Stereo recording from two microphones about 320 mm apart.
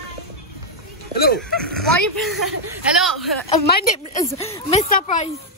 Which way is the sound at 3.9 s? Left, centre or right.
Centre.